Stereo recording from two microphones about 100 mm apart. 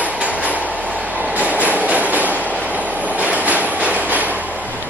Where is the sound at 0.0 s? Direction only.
15° right (ahead or behind).